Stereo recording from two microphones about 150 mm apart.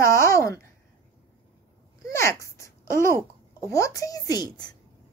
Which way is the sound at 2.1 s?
20° left (ahead or behind).